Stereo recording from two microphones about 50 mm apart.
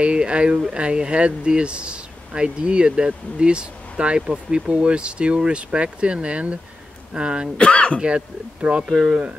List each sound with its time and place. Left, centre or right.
0.0 s speech: right
7.5 s speech: left
8.0 s speech: right